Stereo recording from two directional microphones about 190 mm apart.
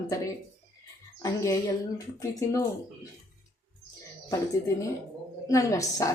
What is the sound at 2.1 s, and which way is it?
Speech, 15° left (ahead or behind).